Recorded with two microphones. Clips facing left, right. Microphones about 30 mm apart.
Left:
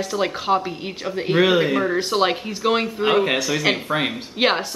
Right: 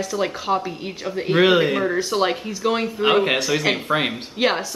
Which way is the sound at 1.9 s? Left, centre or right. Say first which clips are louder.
Left 1 dB; left.